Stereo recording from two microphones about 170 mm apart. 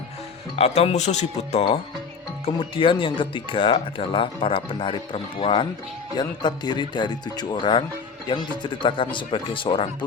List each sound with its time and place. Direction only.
0.5 s speech: 40° left (ahead or behind)